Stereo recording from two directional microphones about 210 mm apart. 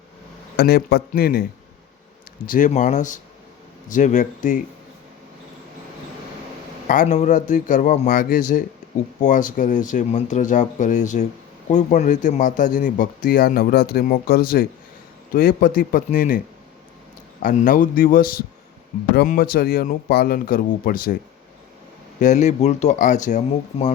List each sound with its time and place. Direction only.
0.5 s speech: 50° left (ahead or behind)
2.5 s speech: 35° left (ahead or behind)
6.8 s speech: 40° left (ahead or behind)
17.4 s speech: 40° left (ahead or behind)
22.2 s speech: 35° left (ahead or behind)